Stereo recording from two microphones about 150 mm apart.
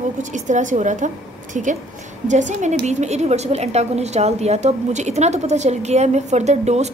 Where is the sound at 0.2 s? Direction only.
55° right (ahead or behind).